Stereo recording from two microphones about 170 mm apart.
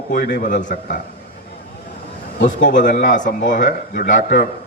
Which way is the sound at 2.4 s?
50° left (ahead or behind).